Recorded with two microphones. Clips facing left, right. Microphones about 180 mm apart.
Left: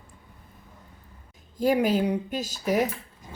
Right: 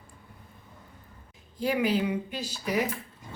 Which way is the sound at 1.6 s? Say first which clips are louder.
Left 4 dB; 45° left (ahead or behind).